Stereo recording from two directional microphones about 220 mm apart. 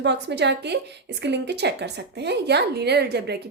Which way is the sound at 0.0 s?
50° right (ahead or behind).